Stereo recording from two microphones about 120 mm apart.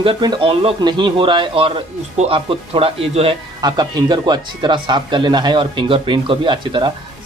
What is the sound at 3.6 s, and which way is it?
Speech, 35° right (ahead or behind).